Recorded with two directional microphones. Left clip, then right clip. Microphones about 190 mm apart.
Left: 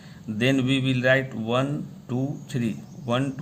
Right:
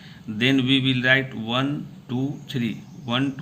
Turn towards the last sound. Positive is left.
turn(degrees=40)  # may be behind; listen again after turning